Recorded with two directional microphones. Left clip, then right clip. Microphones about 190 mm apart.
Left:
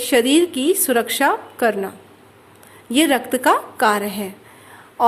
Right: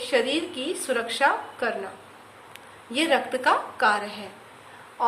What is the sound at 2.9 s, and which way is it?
A woman's voice, 50° left (ahead or behind).